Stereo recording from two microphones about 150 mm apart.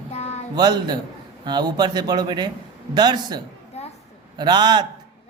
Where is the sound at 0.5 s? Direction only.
30° right (ahead or behind).